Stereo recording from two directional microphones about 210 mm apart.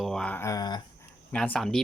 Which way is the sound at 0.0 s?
5° left (ahead or behind).